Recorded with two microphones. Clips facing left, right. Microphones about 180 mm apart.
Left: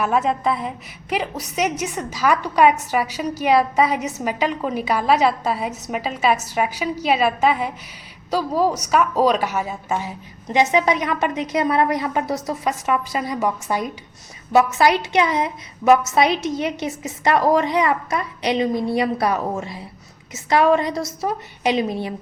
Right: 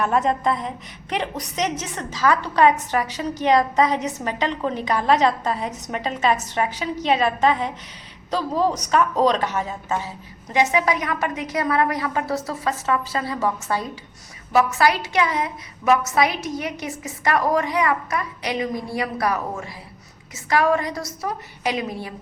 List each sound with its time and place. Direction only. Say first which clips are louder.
0.0 s a woman's voice: left 1 dB; 5° left (ahead or behind); by 22.1 s 25° left (ahead or behind)